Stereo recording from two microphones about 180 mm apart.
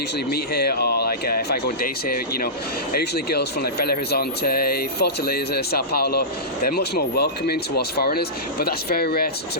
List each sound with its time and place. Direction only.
0.3 s speech: 60° left (ahead or behind)